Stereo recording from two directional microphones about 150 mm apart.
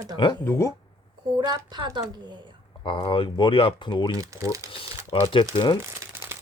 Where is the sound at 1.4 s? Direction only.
30° right (ahead or behind).